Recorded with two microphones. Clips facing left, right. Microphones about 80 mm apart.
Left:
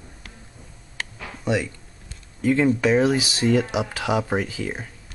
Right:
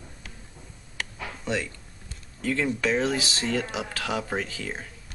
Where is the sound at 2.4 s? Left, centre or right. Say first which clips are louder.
Left 7 dB; centre.